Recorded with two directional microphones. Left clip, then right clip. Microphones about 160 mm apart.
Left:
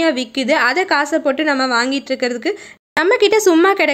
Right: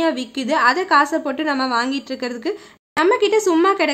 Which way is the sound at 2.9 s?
35° left (ahead or behind).